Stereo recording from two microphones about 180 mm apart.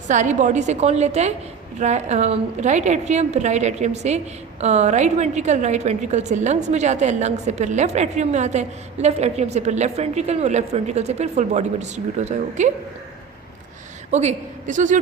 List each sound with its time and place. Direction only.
0.1 s a woman's voice: 40° right (ahead or behind)
14.1 s a woman's voice: 40° right (ahead or behind)